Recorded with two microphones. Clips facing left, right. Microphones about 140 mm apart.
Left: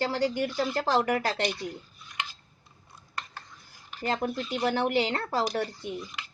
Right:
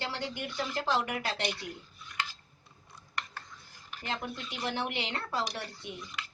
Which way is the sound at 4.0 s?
40° left (ahead or behind).